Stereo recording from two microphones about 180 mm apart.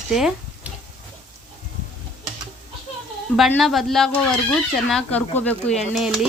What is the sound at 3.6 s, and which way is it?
Speech, centre (ahead or behind).